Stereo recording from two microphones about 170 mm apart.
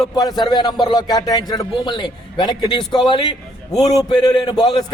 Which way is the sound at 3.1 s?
25° left (ahead or behind).